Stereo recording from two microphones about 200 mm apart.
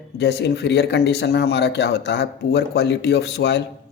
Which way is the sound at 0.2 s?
55° left (ahead or behind).